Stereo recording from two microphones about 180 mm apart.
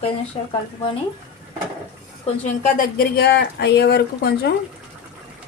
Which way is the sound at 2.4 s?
45° left (ahead or behind).